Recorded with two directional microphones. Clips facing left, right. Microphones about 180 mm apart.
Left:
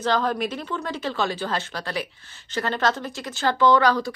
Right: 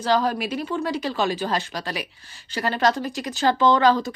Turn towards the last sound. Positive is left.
turn(degrees=-20)  # may be behind; listen again after turning